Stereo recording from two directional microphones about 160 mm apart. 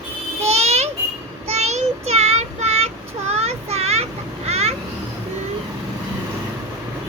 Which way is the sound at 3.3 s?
40° right (ahead or behind).